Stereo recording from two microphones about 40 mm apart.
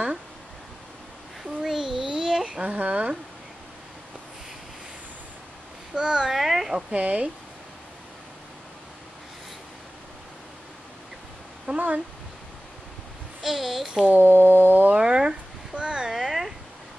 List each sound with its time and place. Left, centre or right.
1.4 s a sound: centre
2.6 s speech: right
5.9 s a child's voice: centre
6.3 s a child's voice: centre
6.9 s speech: right
11.7 s speech: right
13.4 s a child's voice: centre
14.1 s a sound: right
14.9 s cat: right
16.1 s a sound: centre